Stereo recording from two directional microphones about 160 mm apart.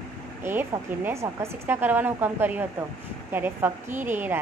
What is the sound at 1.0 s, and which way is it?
A woman's voice, 15° right (ahead or behind).